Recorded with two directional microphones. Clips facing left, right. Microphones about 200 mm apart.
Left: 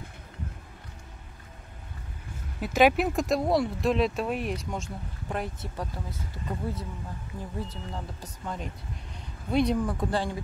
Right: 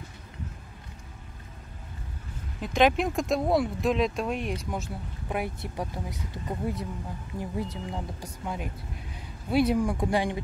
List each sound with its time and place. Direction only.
2.6 s speech: 5° left (ahead or behind); by 10.4 s 15° right (ahead or behind)